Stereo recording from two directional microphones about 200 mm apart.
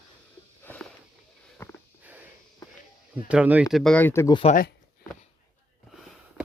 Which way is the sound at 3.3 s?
5° right (ahead or behind).